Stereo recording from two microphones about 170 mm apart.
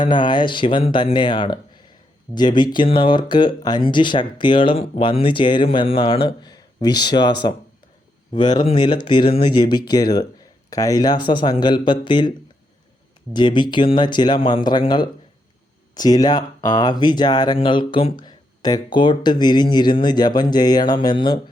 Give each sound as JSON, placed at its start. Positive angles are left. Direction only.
{"t": 0.0, "sound": "speech", "side_deg": 25}
{"t": 13.3, "sound": "speech", "side_deg": 25}